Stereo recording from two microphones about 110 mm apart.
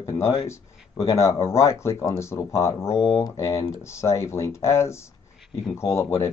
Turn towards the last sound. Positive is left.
turn(degrees=25)  # may be behind; listen again after turning